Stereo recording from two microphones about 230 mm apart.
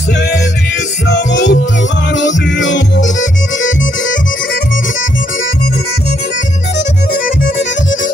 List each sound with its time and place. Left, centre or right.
1.0 s music: left